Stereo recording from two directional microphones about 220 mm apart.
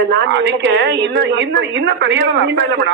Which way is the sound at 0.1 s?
55° right (ahead or behind).